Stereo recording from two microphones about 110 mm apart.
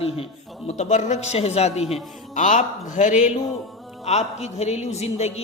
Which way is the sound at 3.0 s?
90° left.